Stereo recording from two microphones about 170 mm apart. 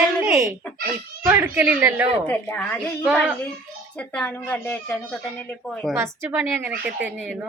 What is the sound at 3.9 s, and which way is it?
Speech, 10° left (ahead or behind).